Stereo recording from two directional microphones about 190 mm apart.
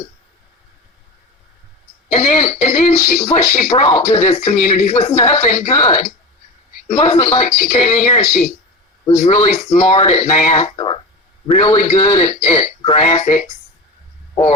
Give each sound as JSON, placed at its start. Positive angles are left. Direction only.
{"t": 2.1, "sound": "speech", "side_deg": 35}